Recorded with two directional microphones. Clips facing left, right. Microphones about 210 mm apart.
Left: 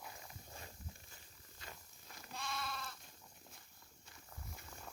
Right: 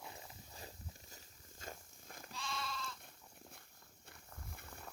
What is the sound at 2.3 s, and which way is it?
Sheep, 55° left (ahead or behind).